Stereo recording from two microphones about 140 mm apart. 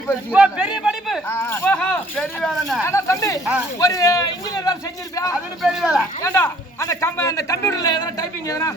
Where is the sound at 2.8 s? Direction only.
20° left (ahead or behind).